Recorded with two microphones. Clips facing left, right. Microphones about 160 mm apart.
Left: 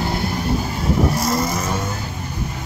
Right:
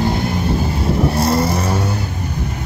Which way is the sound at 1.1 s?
30° right (ahead or behind).